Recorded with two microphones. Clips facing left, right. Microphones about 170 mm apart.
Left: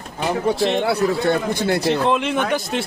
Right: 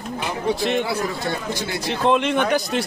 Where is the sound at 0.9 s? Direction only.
60° left (ahead or behind).